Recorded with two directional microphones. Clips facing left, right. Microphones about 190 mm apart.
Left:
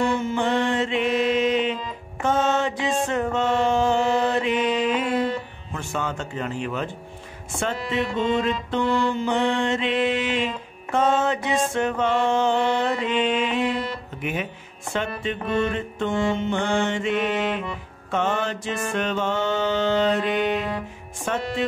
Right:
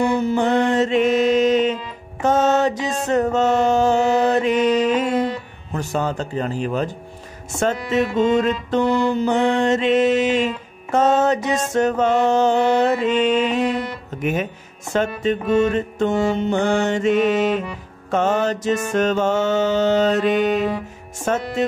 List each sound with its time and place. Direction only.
0.1 s music: 40° right (ahead or behind)
3.1 s mantra: 40° right (ahead or behind)
5.7 s speech: 40° right (ahead or behind)
7.5 s music: 45° right (ahead or behind)
14.2 s speech: 45° right (ahead or behind)
18.1 s music: 40° right (ahead or behind)